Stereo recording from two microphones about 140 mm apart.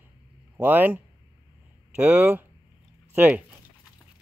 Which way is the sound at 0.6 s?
15° right (ahead or behind).